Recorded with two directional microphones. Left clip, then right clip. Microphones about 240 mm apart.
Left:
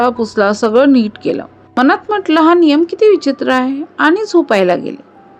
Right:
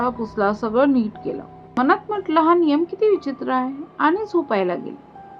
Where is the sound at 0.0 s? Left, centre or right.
Left.